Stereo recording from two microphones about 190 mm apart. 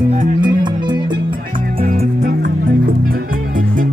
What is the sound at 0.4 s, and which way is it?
Music, 25° right (ahead or behind).